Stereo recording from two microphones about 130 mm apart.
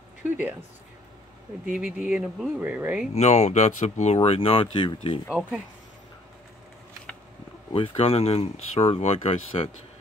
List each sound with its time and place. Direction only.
0.2 s speech: 15° right (ahead or behind)
1.7 s speech: 10° right (ahead or behind)
3.2 s speech: 60° left (ahead or behind); by 5.2 s 40° left (ahead or behind)
7.7 s speech: 45° left (ahead or behind)